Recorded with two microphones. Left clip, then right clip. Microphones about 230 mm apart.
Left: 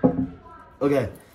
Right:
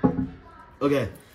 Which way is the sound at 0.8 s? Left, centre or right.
Centre.